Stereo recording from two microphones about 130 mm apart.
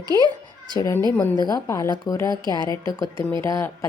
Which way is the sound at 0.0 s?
30° right (ahead or behind).